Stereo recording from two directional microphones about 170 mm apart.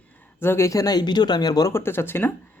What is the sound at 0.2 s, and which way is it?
Speech, 15° left (ahead or behind).